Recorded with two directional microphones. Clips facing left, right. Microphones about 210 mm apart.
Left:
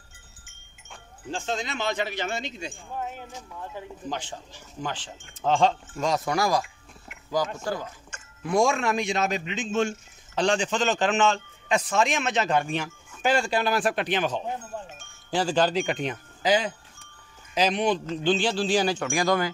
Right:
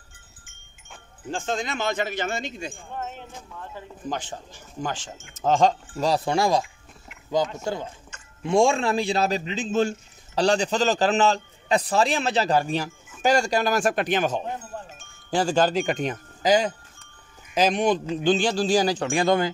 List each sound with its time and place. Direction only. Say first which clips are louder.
1.3 s speech: right 2 dB; 50° right (ahead or behind)
2.9 s speech: left 3 dB; 5° left (ahead or behind)
4.1 s a man's voice: right 4 dB; 50° right (ahead or behind); by 6.6 s 25° right (ahead or behind)
7.6 s a man's voice: right 1 dB; 25° right (ahead or behind)